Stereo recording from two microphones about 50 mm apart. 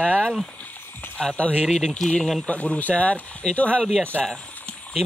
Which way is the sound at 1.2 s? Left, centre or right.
Centre.